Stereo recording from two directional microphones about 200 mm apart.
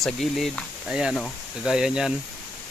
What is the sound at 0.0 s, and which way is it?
Speech, centre (ahead or behind).